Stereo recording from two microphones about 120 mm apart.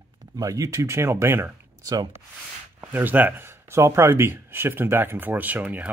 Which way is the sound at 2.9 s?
15° right (ahead or behind).